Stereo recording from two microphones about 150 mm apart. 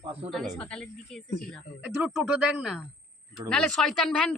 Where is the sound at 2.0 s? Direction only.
5° right (ahead or behind).